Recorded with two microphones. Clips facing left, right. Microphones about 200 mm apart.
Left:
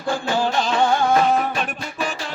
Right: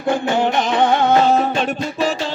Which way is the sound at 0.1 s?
20° right (ahead or behind).